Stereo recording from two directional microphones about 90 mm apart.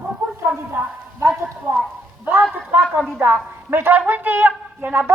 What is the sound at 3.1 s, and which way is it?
A woman's voice, 25° right (ahead or behind).